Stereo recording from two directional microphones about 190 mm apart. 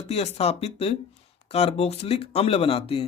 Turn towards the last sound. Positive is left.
turn(degrees=30)  # may be behind; listen again after turning